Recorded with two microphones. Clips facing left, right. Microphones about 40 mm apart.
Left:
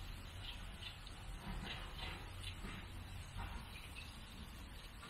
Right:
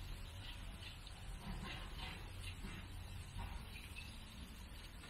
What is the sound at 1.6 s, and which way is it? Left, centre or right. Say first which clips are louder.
Printer: left 1 dB; left.